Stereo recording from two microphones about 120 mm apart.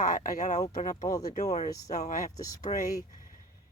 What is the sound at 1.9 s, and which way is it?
Speech, 85° left.